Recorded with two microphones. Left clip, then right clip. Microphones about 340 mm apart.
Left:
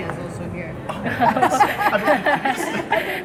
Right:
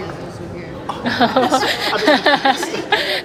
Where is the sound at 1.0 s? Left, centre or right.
Centre.